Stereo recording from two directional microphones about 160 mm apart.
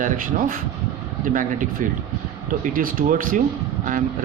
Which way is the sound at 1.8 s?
60° right (ahead or behind).